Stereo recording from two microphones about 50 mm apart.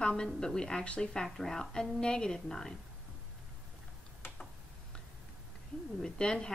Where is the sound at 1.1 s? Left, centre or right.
Centre.